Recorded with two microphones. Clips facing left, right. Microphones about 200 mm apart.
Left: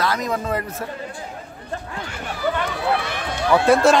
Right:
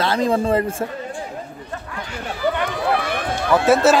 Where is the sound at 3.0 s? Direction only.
55° right (ahead or behind).